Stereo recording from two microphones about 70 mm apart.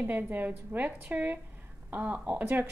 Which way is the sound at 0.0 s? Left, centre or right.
Right.